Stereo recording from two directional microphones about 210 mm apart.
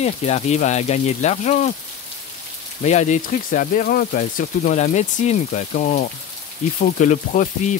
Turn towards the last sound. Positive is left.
turn(degrees=35)  # may be behind; listen again after turning